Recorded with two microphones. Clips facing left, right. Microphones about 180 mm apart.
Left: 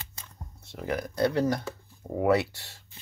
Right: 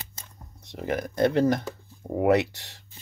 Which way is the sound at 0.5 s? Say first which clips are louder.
Right 2 dB; 20° right (ahead or behind).